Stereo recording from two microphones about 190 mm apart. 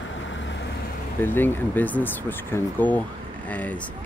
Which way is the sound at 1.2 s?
10° left (ahead or behind).